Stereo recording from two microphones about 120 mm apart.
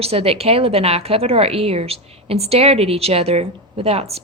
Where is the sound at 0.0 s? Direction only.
55° right (ahead or behind).